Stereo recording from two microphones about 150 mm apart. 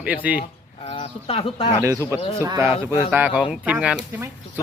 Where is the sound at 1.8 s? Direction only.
20° right (ahead or behind).